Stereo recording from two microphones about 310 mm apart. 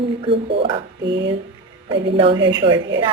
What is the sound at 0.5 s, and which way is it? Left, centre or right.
Speech, centre.